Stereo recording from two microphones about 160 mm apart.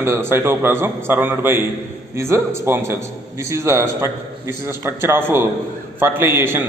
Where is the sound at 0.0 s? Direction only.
15° right (ahead or behind).